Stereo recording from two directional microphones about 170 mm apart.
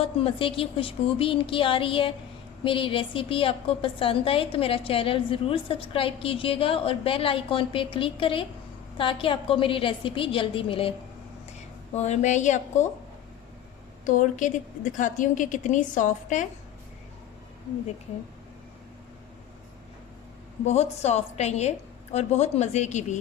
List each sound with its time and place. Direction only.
0.0 s a woman's voice: 35° left (ahead or behind)
11.9 s a woman's voice: 40° left (ahead or behind)
14.0 s a woman's voice: 50° left (ahead or behind)
20.7 s a woman's voice: 40° left (ahead or behind)